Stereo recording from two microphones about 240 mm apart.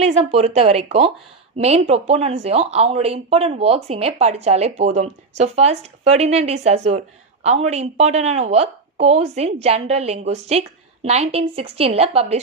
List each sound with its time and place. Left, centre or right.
0.0 s a woman's voice: right